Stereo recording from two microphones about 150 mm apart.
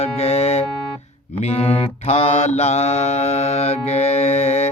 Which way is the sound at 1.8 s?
40° left (ahead or behind).